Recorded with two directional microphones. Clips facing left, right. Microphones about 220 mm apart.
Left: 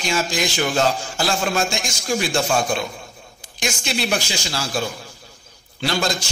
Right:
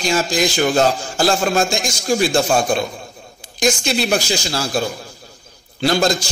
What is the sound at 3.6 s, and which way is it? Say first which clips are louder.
A man's voice: right 7 dB; 40° right (ahead or behind).